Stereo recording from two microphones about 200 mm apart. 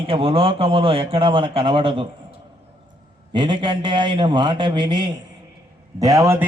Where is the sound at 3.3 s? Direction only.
25° right (ahead or behind).